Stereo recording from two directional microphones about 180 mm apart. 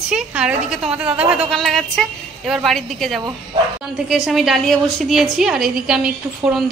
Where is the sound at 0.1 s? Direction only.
5° right (ahead or behind).